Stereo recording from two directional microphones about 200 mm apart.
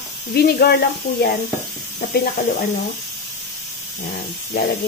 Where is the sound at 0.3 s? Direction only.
55° left (ahead or behind).